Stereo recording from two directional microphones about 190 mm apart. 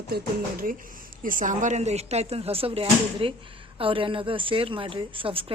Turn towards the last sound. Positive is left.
turn(degrees=-30)  # may be behind; listen again after turning